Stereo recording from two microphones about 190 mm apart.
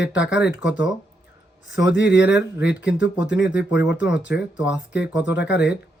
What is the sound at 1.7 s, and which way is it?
Speech, 70° left (ahead or behind).